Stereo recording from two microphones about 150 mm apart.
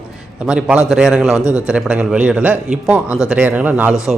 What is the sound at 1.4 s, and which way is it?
Speech, 20° left (ahead or behind).